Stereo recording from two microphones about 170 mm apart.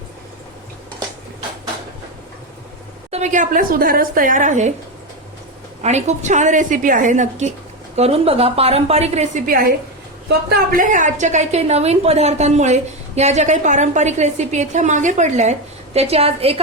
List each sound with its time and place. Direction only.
3.1 s a woman's voice: 45° right (ahead or behind)
5.8 s a woman's voice: 40° right (ahead or behind)
10.2 s a woman's voice: 60° right (ahead or behind); by 16.6 s 35° right (ahead or behind)